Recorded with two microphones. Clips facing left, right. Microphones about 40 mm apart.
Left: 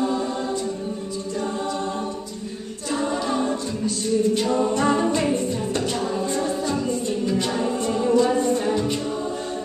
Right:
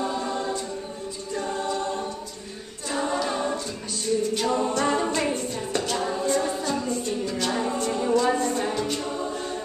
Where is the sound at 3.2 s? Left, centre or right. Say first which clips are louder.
Left 3 dB; centre.